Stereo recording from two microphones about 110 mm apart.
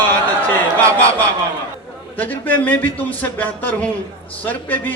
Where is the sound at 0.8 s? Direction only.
30° right (ahead or behind).